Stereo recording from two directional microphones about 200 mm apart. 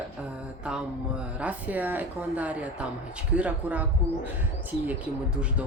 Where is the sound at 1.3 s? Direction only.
5° right (ahead or behind).